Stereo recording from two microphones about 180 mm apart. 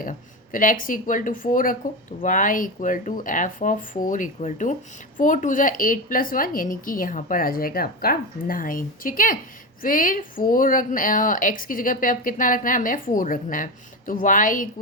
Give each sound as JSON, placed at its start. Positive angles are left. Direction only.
{"t": 0.0, "sound": "a woman's voice", "side_deg": 50}